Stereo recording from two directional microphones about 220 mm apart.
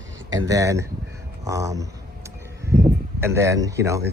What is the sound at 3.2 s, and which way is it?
Speech, 10° right (ahead or behind).